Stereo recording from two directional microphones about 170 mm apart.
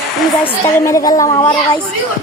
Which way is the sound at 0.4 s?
20° left (ahead or behind).